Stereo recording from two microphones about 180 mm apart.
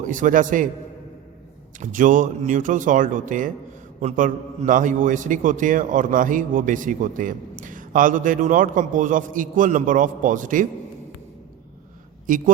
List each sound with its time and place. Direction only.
0.0 s a man's voice: 45° right (ahead or behind)
1.8 s a man's voice: 45° right (ahead or behind)
12.3 s a man's voice: 50° right (ahead or behind)